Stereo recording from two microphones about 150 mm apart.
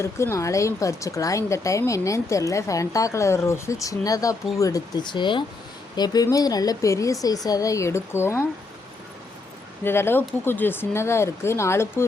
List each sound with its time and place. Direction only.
0.0 s speech: 20° left (ahead or behind)
9.8 s speech: 15° left (ahead or behind)